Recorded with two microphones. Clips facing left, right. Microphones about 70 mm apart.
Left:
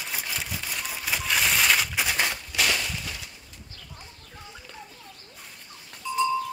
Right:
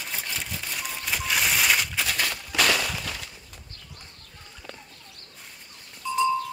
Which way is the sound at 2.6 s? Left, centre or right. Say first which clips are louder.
Right 3 dB; right.